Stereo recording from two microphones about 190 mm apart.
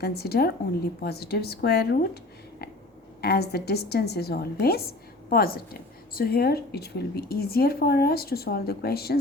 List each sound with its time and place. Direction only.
0.0 s a woman's voice: 55° left (ahead or behind)
3.2 s a woman's voice: 55° left (ahead or behind)